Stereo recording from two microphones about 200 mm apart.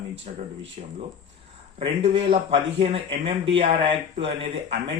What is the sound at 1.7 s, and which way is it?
Speech, 30° right (ahead or behind).